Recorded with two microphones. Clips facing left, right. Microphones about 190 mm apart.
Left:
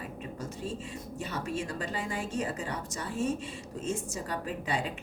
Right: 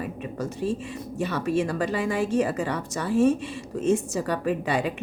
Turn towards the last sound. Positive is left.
turn(degrees=-70)  # may be behind; listen again after turning